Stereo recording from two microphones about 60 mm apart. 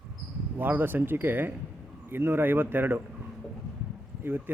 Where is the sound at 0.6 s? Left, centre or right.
Right.